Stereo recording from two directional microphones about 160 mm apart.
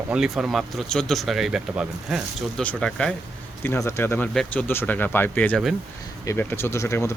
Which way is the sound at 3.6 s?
15° left (ahead or behind).